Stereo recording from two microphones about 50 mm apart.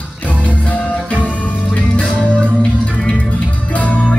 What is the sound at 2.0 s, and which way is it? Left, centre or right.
Music, left.